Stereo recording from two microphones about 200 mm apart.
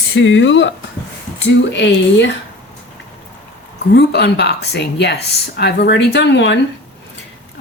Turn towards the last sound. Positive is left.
turn(degrees=60)  # may be behind; listen again after turning